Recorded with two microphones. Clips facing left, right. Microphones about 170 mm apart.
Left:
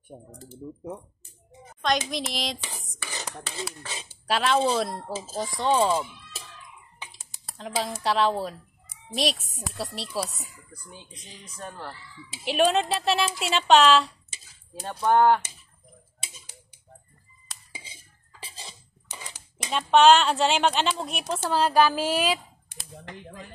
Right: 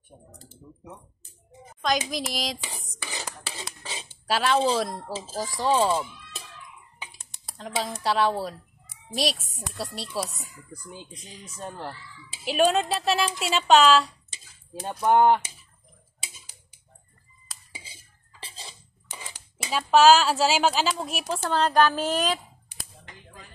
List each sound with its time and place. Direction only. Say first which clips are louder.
0.1 s speech: left 6 dB; 35° left (ahead or behind)
1.8 s a woman's voice: even; centre (ahead or behind)
3.0 s speech: right 1 dB; 10° right (ahead or behind)
4.3 s a woman's voice: even; centre (ahead or behind)
5.9 s a sound: even; 5° left (ahead or behind)
7.2 s a woman's voice: even; 5° left (ahead or behind)
11.6 s speech: right 2 dB; 15° right (ahead or behind)
12.4 s speech: even; centre (ahead or behind)
14.9 s speech: right 1 dB; 15° right (ahead or behind)
18.4 s a sound: even; 5° left (ahead or behind)
19.0 s a sound: even; 5° right (ahead or behind)
19.9 s a woman's voice: even; centre (ahead or behind)